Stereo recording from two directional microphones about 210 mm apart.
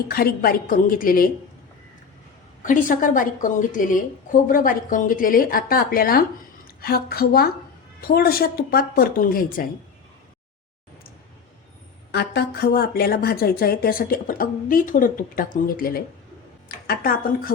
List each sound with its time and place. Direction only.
0.1 s speech: 45° left (ahead or behind)
2.6 s a woman's voice: 40° left (ahead or behind)
12.1 s speech: 50° left (ahead or behind)